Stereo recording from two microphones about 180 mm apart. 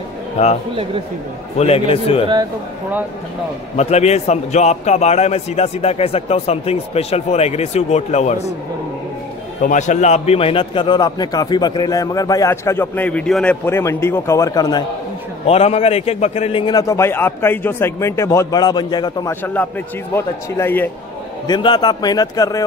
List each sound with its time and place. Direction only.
0.4 s a man's voice: 40° left (ahead or behind)
1.6 s a man's voice: 35° left (ahead or behind)
3.7 s a man's voice: 35° left (ahead or behind)
9.6 s a man's voice: 45° left (ahead or behind); by 14.9 s 20° left (ahead or behind)
15.4 s a man's voice: 35° left (ahead or behind)
19.4 s speech: 10° left (ahead or behind)
21.5 s a man's voice: 25° left (ahead or behind)